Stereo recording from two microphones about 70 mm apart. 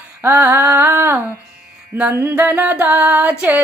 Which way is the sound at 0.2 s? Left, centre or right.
Right.